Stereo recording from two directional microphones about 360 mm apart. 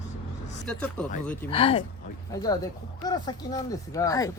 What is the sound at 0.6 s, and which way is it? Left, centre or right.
Speech, centre.